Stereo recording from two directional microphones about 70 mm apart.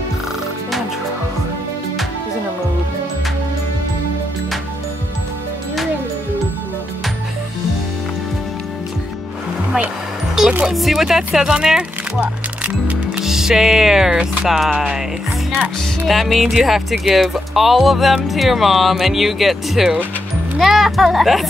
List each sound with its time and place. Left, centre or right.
10.6 s speech: centre
12.2 s music: right
13.2 s music: centre
14.4 s speech: centre
16.1 s speech: centre